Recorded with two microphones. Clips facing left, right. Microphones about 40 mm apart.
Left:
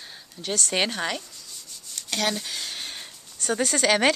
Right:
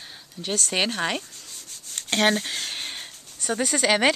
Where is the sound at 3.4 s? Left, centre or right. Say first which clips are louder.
Even; centre.